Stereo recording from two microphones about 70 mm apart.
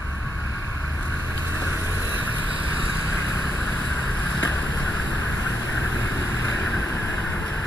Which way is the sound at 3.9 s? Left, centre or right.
Left.